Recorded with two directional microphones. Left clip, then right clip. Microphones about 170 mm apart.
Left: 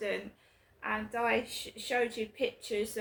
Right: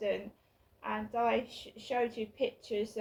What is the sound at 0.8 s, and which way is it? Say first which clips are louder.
A woman's voice: even; 15° left (ahead or behind).